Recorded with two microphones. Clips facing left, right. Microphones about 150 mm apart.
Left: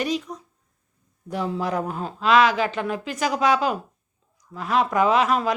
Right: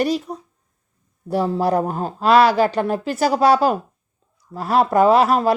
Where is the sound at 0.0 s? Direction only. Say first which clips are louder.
Right 5 dB; 40° right (ahead or behind).